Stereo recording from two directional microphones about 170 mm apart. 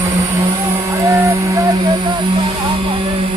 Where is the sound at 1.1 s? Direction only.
15° right (ahead or behind).